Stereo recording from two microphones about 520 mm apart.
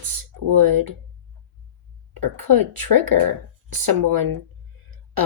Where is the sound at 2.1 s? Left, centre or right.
Right.